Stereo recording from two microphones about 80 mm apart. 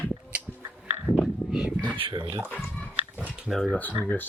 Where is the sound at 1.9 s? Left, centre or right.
Right.